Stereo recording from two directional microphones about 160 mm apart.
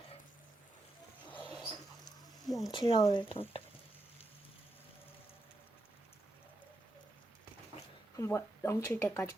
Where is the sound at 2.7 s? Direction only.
30° left (ahead or behind).